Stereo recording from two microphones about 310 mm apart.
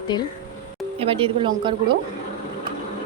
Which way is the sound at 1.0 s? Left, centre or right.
Centre.